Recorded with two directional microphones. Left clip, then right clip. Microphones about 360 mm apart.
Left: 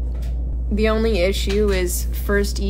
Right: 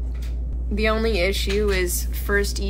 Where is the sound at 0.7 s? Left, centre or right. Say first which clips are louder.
Left 2 dB; centre.